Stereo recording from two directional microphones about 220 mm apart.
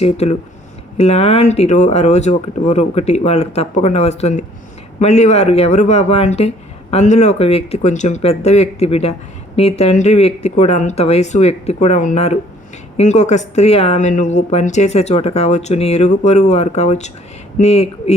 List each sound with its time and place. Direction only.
0.0 s speech: 30° left (ahead or behind)